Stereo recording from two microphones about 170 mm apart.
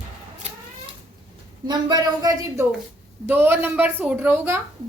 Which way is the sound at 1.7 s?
25° right (ahead or behind).